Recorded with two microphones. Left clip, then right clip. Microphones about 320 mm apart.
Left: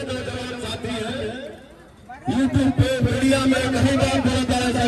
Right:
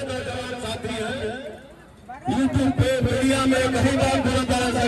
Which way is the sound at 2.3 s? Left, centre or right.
Right.